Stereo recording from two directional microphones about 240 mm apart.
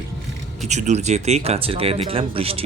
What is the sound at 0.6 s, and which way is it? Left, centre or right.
Speech, right.